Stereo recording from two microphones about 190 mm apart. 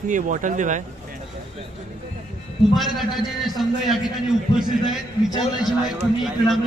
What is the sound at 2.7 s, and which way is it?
A man's voice, centre (ahead or behind).